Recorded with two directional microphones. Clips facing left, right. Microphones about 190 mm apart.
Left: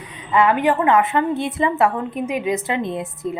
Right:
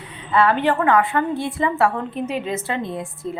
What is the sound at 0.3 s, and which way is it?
A woman's voice, 15° left (ahead or behind).